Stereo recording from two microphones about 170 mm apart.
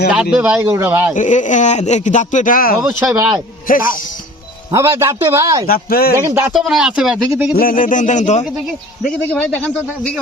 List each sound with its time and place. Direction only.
0.1 s speech: 5° right (ahead or behind)
1.1 s speech: 45° left (ahead or behind)
3.0 s speech: 10° right (ahead or behind)
3.7 s speech: 55° left (ahead or behind)
4.7 s speech: 15° right (ahead or behind)
5.6 s speech: 60° left (ahead or behind)
6.1 s speech: 15° right (ahead or behind)
6.5 s speech: centre (ahead or behind)
7.5 s speech: 55° left (ahead or behind)
9.3 s speech: 10° left (ahead or behind)